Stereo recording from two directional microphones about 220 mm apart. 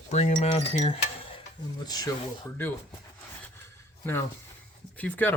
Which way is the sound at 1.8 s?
15° left (ahead or behind).